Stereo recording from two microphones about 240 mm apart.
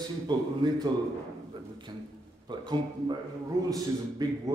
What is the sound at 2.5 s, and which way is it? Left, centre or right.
Speech, centre.